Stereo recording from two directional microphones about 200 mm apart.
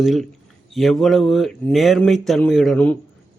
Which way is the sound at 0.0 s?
Centre (ahead or behind).